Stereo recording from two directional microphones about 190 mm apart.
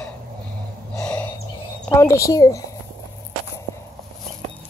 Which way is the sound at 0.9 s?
5° left (ahead or behind).